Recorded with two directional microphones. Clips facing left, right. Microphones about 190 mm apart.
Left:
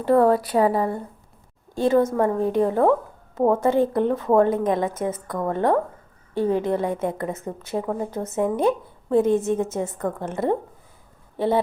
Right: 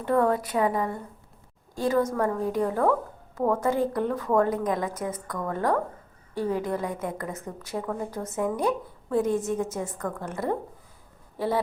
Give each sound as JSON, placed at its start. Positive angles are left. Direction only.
{"t": 0.0, "sound": "a woman's voice", "side_deg": 35}